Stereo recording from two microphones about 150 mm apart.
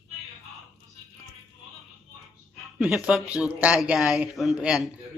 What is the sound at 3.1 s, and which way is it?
A man's voice, 5° right (ahead or behind).